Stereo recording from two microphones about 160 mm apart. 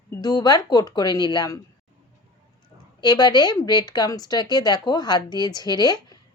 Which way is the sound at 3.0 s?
25° left (ahead or behind).